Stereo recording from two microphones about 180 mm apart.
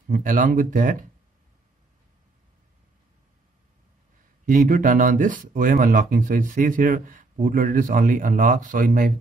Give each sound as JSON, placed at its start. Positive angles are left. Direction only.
{"t": 0.1, "sound": "speech", "side_deg": -50}
{"t": 4.5, "sound": "speech", "side_deg": -50}